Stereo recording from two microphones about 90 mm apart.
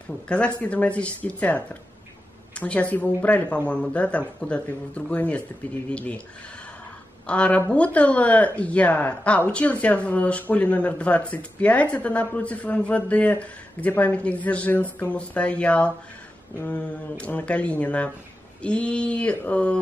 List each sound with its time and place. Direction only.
0.3 s speech: 15° left (ahead or behind)
7.2 s speech: 15° left (ahead or behind)